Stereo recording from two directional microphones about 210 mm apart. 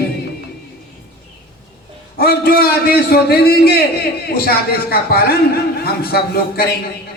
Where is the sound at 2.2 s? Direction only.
45° left (ahead or behind).